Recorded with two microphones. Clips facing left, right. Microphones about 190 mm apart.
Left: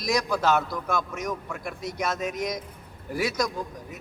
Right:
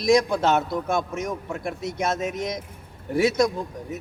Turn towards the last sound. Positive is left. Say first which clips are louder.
# right 4 dB
turn(degrees=-25)  # may be behind; listen again after turning